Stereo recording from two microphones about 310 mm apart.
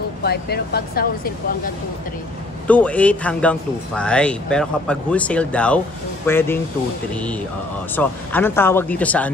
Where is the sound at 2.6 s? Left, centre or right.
Centre.